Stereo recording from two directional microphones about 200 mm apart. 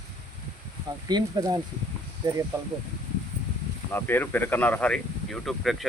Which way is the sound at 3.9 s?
10° left (ahead or behind).